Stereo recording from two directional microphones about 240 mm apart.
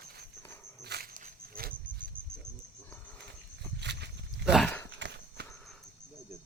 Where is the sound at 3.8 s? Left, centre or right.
Right.